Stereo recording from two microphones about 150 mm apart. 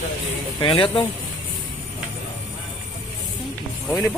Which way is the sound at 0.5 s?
35° left (ahead or behind).